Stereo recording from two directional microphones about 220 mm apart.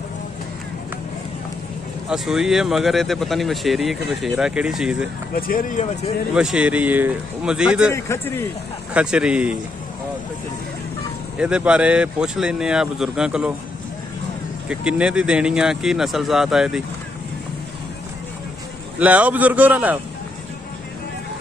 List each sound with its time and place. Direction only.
2.0 s speech: centre (ahead or behind)
5.3 s speech: 40° left (ahead or behind)
6.3 s speech: 5° right (ahead or behind)
7.9 s a man's voice: 10° left (ahead or behind)
8.9 s speech: 5° right (ahead or behind)
11.3 s speech: 5° right (ahead or behind)
14.7 s speech: 5° right (ahead or behind)
18.9 s a man's voice: 5° right (ahead or behind)